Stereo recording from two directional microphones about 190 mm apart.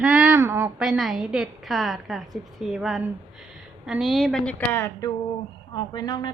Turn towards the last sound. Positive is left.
turn(degrees=20)  # may be behind; listen again after turning